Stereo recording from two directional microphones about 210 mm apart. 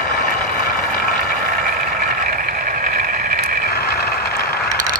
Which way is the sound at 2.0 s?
40° right (ahead or behind).